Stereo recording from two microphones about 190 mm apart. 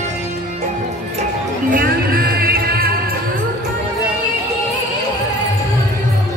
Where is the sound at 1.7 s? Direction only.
50° right (ahead or behind).